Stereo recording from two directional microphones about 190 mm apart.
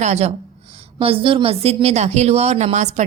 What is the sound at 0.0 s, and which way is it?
Speech, 35° right (ahead or behind).